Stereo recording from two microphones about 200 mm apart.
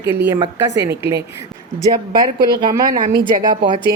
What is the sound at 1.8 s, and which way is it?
Speech, 20° right (ahead or behind).